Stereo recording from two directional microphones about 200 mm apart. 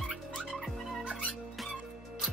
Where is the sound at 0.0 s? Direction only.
Centre (ahead or behind).